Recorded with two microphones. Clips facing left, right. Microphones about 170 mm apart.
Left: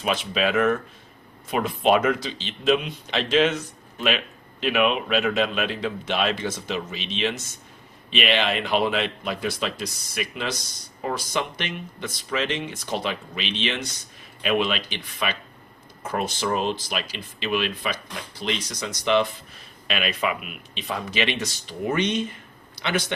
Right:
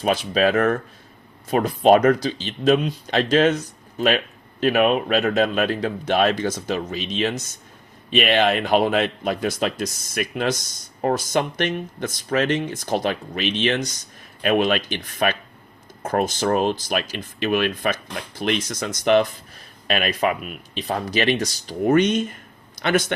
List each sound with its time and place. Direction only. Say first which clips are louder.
0.0 s speech: right 5 dB; 40° right (ahead or behind)